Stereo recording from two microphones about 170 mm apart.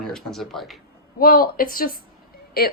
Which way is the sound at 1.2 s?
60° left (ahead or behind).